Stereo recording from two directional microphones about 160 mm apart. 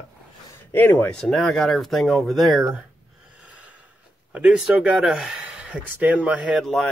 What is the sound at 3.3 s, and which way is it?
Snort, 10° right (ahead or behind).